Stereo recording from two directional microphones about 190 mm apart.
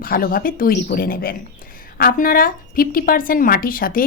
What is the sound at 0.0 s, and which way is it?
A woman's voice, 50° left (ahead or behind).